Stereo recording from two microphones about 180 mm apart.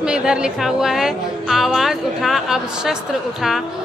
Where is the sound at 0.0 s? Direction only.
5° right (ahead or behind).